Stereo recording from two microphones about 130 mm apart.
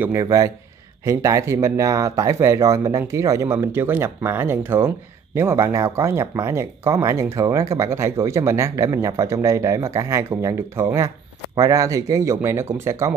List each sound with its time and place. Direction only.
0.0 s speech: 25° right (ahead or behind)